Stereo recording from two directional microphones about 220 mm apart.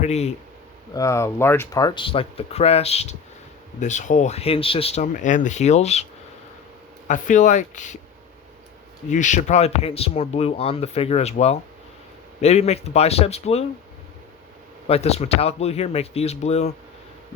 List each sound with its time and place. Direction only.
0.0 s speech: 30° left (ahead or behind)
0.9 s speech: 15° left (ahead or behind); by 6.1 s 30° left (ahead or behind)
7.1 s speech: 35° left (ahead or behind)
9.0 s speech: 35° left (ahead or behind)
14.8 s speech: 30° left (ahead or behind)